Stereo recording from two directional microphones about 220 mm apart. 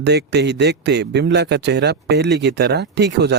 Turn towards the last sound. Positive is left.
turn(degrees=-50)  # may be behind; listen again after turning